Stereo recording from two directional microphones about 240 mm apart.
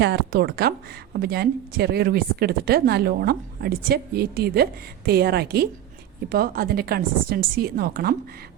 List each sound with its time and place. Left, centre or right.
0.0 s speech: right